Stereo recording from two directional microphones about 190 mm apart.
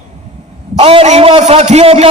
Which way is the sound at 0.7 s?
30° right (ahead or behind).